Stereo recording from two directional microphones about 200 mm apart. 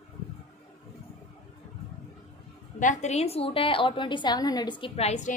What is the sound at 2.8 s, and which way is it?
A woman's voice, 35° left (ahead or behind).